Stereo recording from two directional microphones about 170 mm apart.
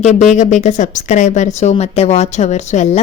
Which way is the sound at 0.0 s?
40° left (ahead or behind).